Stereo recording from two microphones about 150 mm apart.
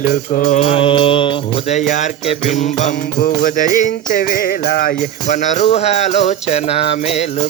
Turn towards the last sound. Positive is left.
turn(degrees=45)  # may be behind; listen again after turning